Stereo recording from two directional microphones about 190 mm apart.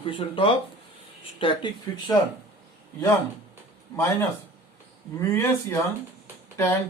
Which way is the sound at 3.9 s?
15° left (ahead or behind).